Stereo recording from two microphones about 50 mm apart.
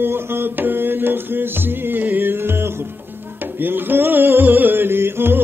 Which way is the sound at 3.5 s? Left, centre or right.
Right.